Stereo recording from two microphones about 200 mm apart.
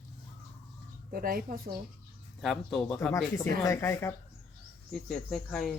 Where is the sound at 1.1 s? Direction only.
45° right (ahead or behind).